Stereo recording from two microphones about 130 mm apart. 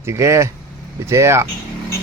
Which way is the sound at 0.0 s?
20° right (ahead or behind).